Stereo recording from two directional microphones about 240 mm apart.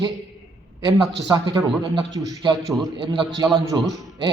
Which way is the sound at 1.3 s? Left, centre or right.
Centre.